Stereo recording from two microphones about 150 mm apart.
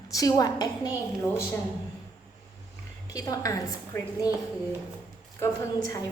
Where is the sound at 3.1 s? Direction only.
25° left (ahead or behind).